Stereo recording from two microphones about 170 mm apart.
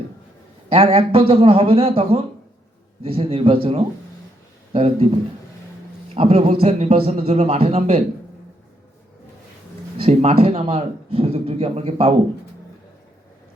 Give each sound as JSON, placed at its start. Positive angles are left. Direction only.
{"t": 0.7, "sound": "speech", "side_deg": -35}
{"t": 6.1, "sound": "speech", "side_deg": -40}
{"t": 10.0, "sound": "speech", "side_deg": -40}